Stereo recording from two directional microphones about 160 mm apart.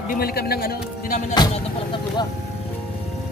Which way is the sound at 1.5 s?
30° left (ahead or behind).